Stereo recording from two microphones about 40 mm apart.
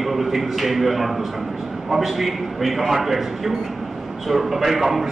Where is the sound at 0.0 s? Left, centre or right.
Centre.